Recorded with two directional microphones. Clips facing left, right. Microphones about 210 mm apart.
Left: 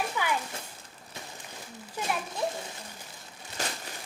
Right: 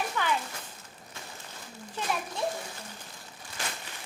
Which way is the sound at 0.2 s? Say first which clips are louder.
Right 2 dB; 10° left (ahead or behind).